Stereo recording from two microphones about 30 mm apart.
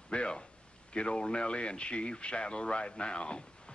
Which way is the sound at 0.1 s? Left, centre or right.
Left.